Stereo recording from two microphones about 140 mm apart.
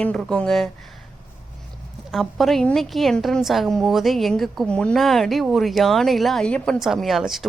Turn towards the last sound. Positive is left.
turn(degrees=0)  # may be behind; listen again after turning